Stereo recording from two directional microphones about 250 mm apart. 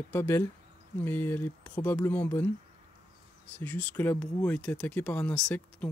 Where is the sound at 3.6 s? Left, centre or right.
Centre.